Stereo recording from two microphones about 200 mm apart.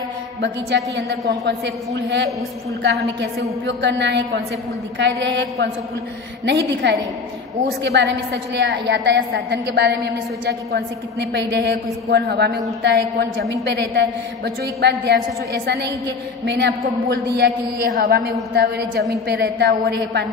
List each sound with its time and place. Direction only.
0.4 s a woman's voice: 60° right (ahead or behind)
3.6 s a woman's voice: 60° right (ahead or behind)